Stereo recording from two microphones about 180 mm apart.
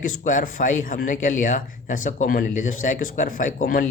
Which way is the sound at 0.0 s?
50° left (ahead or behind).